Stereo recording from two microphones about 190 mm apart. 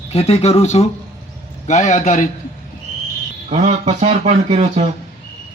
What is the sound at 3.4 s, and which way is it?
Speech, 35° right (ahead or behind).